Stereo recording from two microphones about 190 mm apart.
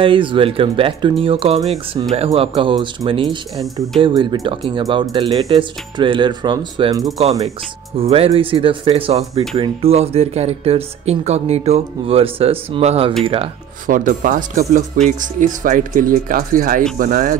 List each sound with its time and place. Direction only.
0.0 s speech: 25° right (ahead or behind)
8.0 s speech: 30° right (ahead or behind)
13.8 s speech: 45° right (ahead or behind)